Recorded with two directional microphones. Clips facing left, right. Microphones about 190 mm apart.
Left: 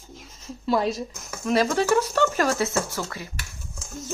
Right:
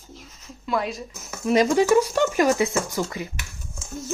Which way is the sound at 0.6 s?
35° left (ahead or behind).